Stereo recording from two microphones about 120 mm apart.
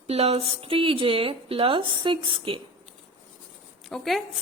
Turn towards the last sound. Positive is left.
turn(degrees=0)  # may be behind; listen again after turning